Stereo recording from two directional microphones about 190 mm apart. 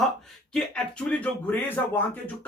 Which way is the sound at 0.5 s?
5° left (ahead or behind).